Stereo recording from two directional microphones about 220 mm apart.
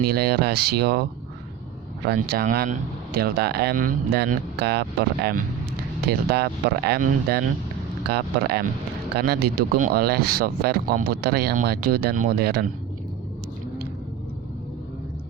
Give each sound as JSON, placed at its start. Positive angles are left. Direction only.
{"t": 0.0, "sound": "speech", "side_deg": -45}
{"t": 2.2, "sound": "speech", "side_deg": -45}
{"t": 8.0, "sound": "speech", "side_deg": -45}